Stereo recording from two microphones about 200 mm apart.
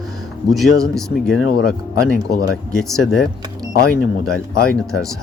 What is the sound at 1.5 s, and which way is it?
Speech, 50° left (ahead or behind).